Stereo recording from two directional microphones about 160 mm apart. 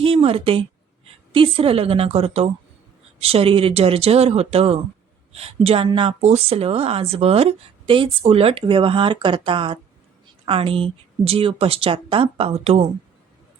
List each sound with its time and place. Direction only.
0.0 s a woman's voice: 35° right (ahead or behind)